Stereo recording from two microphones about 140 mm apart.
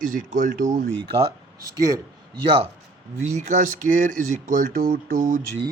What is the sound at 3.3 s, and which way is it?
Speech, 60° right (ahead or behind).